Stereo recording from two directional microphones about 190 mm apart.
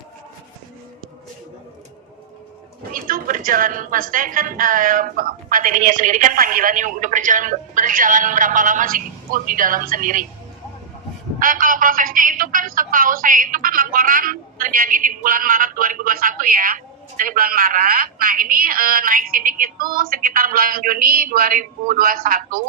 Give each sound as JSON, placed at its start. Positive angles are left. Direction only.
{"t": 2.9, "sound": "a woman's voice", "side_deg": -45}
{"t": 11.3, "sound": "a woman's voice", "side_deg": -45}